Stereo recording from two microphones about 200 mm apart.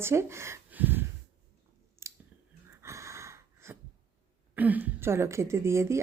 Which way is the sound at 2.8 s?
15° right (ahead or behind).